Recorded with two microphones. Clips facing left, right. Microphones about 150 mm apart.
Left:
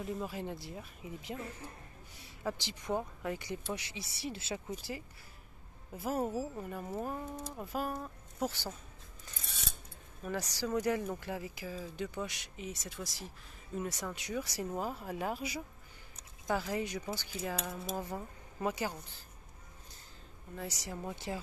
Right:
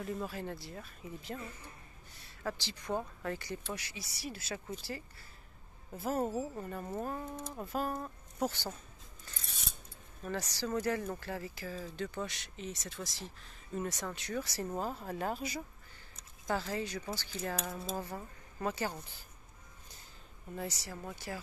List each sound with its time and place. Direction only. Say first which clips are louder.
0.0 s speech: even; 15° left (ahead or behind); by 8.5 s centre (ahead or behind)
10.2 s speech: left 1 dB; 10° left (ahead or behind)
20.6 s speech: left 3 dB; 20° left (ahead or behind)